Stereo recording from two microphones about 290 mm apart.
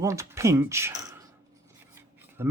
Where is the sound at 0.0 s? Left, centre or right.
Centre.